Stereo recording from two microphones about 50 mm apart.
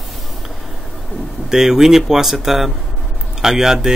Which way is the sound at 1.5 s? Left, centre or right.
Centre.